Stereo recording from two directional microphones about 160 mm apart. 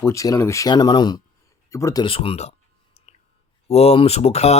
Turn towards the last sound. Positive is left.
turn(degrees=40)  # may be behind; listen again after turning